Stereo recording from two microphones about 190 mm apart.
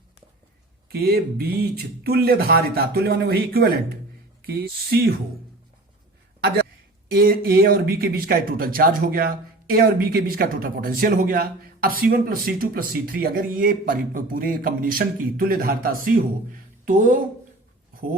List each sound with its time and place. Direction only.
0.9 s speech: 55° right (ahead or behind)
7.1 s speech: 50° right (ahead or behind)